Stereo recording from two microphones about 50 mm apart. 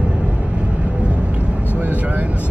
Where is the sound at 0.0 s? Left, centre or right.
Right.